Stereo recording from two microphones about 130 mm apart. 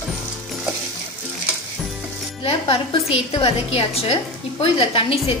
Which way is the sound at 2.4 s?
40° left (ahead or behind).